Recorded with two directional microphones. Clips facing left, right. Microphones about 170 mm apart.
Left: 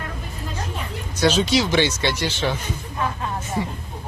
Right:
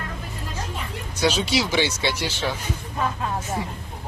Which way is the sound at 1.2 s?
10° right (ahead or behind).